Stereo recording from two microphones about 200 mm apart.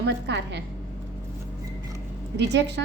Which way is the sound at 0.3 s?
60° right (ahead or behind).